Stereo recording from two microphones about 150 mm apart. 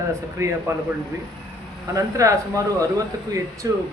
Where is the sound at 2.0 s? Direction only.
20° right (ahead or behind).